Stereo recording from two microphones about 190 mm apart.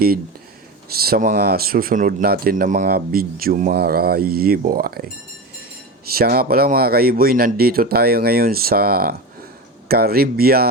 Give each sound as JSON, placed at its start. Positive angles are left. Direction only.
{"t": 0.9, "sound": "speech", "side_deg": -55}
{"t": 6.1, "sound": "speech", "side_deg": -55}